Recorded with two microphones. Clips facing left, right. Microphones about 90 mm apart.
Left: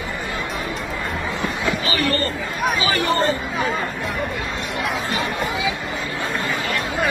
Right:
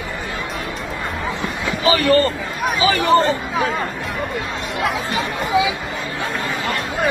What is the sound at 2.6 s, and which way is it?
Speech, centre (ahead or behind).